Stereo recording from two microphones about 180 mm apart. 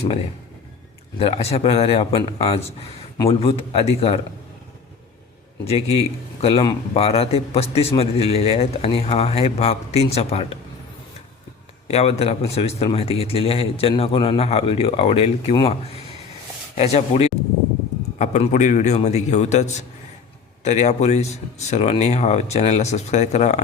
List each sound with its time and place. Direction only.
1.2 s a man's voice: 35° left (ahead or behind)
5.6 s a man's voice: 35° left (ahead or behind)
11.9 s a man's voice: 35° left (ahead or behind)